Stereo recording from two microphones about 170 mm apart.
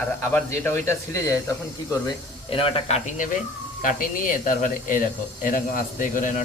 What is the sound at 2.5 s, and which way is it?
A man's voice, 35° left (ahead or behind).